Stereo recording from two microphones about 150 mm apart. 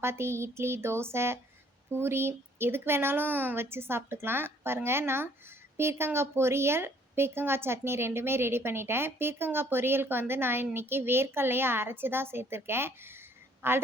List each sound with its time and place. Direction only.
0.0 s a woman's voice: 15° right (ahead or behind)